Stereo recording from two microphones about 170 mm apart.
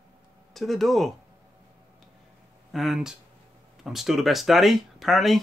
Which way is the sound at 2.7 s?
Centre (ahead or behind).